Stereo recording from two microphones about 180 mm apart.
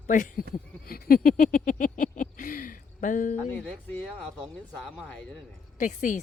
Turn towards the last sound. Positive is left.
turn(degrees=45)  # may be behind; listen again after turning